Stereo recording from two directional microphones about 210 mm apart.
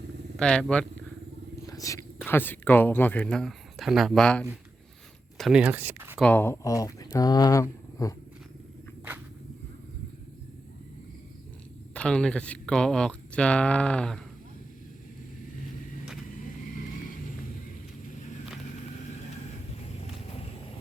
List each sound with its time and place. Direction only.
0.3 s speech: 5° left (ahead or behind)
1.6 s speech: 15° left (ahead or behind); by 6.1 s 10° right (ahead or behind)
6.1 s speech: 5° left (ahead or behind)
11.9 s speech: 5° left (ahead or behind)